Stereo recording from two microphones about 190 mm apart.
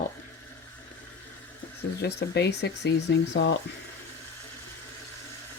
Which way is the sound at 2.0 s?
60° left (ahead or behind).